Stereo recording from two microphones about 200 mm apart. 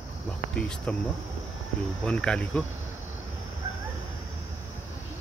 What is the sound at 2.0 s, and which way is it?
Cricket, 5° left (ahead or behind).